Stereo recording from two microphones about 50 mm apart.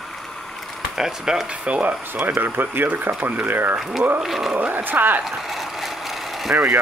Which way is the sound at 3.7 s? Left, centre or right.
Centre.